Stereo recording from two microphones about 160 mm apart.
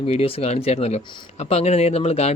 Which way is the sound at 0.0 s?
40° left (ahead or behind).